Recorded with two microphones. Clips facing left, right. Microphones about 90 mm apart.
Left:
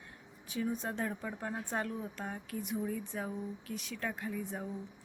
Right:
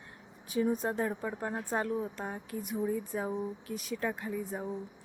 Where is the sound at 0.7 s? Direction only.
45° right (ahead or behind).